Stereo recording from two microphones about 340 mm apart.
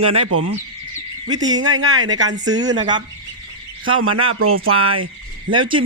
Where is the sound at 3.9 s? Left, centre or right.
Right.